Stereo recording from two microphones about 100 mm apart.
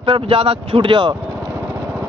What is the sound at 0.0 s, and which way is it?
Speech, 60° right (ahead or behind).